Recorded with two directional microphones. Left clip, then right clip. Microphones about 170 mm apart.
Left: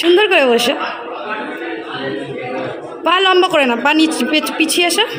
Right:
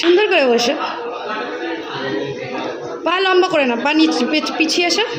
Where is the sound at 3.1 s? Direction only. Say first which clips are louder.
Left 3 dB; 5° left (ahead or behind).